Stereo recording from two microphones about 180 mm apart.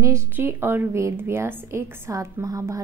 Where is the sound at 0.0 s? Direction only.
15° right (ahead or behind).